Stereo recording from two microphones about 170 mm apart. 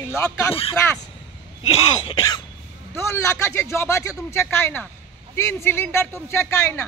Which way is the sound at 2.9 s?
15° left (ahead or behind).